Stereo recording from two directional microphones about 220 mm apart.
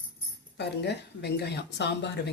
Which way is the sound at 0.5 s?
50° left (ahead or behind).